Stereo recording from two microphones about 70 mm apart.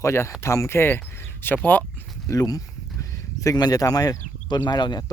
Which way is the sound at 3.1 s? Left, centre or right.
Left.